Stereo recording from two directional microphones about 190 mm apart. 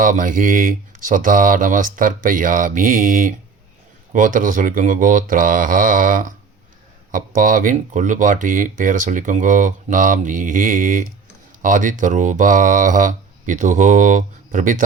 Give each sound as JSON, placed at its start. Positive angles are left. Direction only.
{"t": 0.0, "sound": "speech", "side_deg": -45}